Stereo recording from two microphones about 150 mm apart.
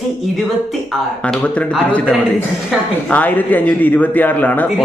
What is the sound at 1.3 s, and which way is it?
Speech, 10° left (ahead or behind).